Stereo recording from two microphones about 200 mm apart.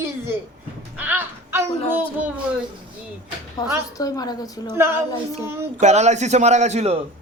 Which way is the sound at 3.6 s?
15° left (ahead or behind).